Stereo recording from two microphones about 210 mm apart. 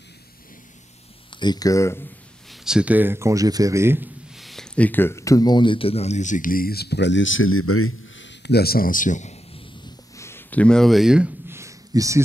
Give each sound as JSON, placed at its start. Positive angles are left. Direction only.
{"t": 1.3, "sound": "speech", "side_deg": 20}
{"t": 2.5, "sound": "a man's voice", "side_deg": -5}
{"t": 10.1, "sound": "a sound", "side_deg": 10}